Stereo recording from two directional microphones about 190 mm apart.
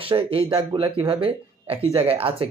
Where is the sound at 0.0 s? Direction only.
30° right (ahead or behind).